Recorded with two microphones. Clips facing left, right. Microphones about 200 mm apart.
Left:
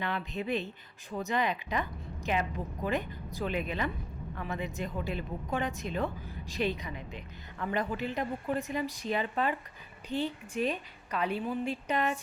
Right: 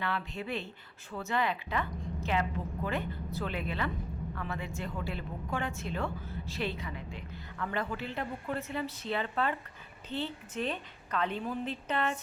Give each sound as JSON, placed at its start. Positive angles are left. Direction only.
{"t": 0.0, "sound": "a woman's voice", "side_deg": 20}